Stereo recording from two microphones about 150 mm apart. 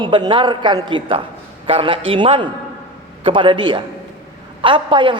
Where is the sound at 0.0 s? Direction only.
30° right (ahead or behind).